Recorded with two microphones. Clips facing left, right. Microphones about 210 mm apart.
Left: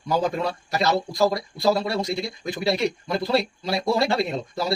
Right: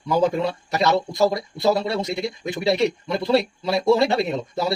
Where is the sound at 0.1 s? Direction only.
25° right (ahead or behind).